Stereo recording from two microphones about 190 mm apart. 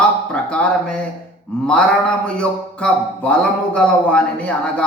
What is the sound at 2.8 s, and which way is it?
A man's voice, 5° left (ahead or behind).